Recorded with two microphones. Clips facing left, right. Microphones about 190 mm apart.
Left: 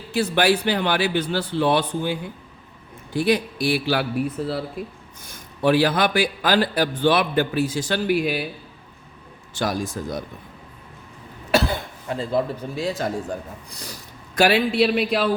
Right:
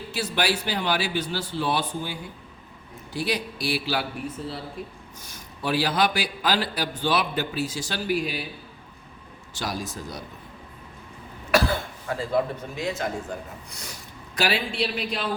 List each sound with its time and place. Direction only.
0.1 s a man's voice: 50° left (ahead or behind)
5.2 s a man's voice: 55° left (ahead or behind)
9.6 s a man's voice: 50° left (ahead or behind)
11.5 s speech: 25° left (ahead or behind)
14.3 s a man's voice: 55° left (ahead or behind)